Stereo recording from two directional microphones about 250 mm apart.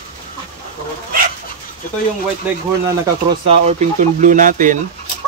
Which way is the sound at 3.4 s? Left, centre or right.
Right.